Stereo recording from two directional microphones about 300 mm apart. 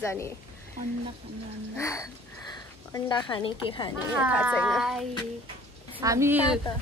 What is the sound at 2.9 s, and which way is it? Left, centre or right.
A woman's voice, centre.